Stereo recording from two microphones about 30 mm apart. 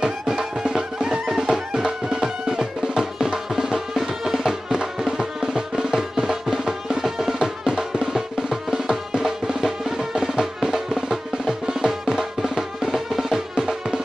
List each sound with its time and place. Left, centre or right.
0.0 s music: right
9.6 s music: centre
13.3 s music: right